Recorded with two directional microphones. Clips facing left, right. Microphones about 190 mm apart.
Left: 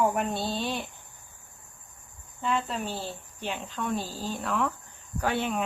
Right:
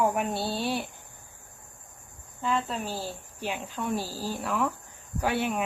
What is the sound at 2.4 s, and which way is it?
Speech, centre (ahead or behind).